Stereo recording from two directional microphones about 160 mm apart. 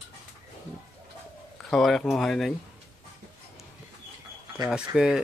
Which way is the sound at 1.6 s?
5° left (ahead or behind).